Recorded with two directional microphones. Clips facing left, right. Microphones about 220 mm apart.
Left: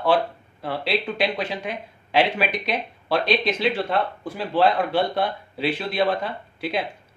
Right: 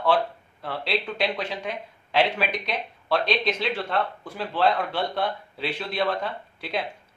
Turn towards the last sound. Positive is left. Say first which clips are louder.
# left 4 dB
turn(degrees=10)  # may be behind; listen again after turning